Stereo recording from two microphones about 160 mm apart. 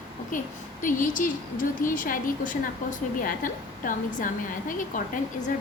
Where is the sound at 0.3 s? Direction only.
55° left (ahead or behind).